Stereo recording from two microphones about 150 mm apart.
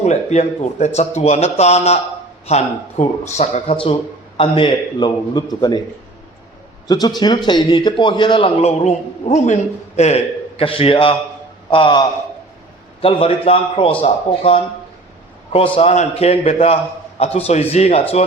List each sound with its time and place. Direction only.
0.0 s a man's voice: 50° left (ahead or behind); by 5.8 s 25° left (ahead or behind)
6.8 s a man's voice: 25° left (ahead or behind); by 18.0 s 45° left (ahead or behind)